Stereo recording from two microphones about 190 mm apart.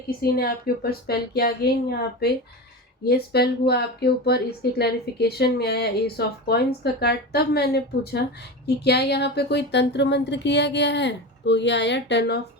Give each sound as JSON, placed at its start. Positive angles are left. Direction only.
{"t": 0.2, "sound": "speech", "side_deg": 55}